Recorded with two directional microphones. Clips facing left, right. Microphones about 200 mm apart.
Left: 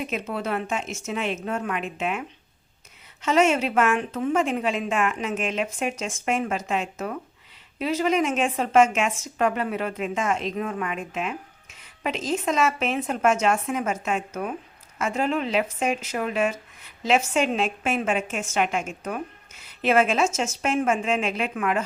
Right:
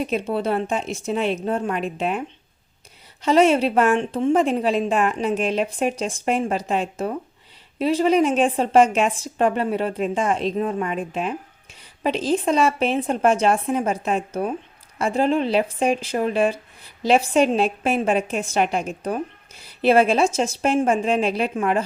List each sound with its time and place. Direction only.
0.0 s speech: 30° right (ahead or behind)